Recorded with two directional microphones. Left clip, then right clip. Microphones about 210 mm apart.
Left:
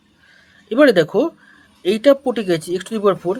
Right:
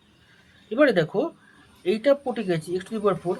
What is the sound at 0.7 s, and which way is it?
Speech, 50° left (ahead or behind).